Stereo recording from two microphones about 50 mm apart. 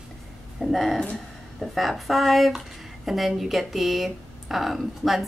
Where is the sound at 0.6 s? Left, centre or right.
Centre.